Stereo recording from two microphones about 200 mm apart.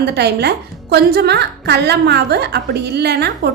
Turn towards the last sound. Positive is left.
turn(degrees=-55)  # may be behind; listen again after turning